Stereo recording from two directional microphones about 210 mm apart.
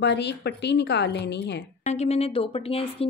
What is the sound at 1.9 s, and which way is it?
A woman's voice, 30° left (ahead or behind).